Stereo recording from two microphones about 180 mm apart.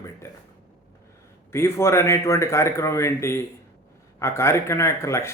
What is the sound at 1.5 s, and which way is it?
A man's voice, 15° left (ahead or behind).